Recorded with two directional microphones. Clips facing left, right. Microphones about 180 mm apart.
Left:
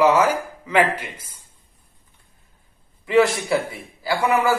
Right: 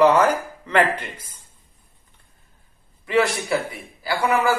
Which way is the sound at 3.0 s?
25° left (ahead or behind).